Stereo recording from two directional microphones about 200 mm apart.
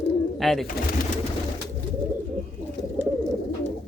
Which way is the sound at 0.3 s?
Centre (ahead or behind).